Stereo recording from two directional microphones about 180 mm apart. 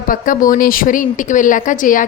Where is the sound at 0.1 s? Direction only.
50° left (ahead or behind).